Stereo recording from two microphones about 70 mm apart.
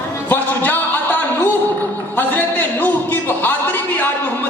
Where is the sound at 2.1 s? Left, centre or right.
Left.